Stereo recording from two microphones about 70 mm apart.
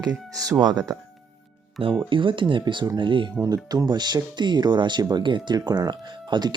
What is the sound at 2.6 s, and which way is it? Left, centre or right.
Speech, right.